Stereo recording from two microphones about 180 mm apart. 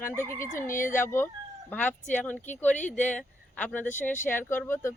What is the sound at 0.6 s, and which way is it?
Speech, 45° left (ahead or behind).